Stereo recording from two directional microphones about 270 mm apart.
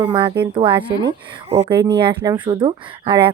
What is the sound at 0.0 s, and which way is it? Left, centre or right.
Speech, centre.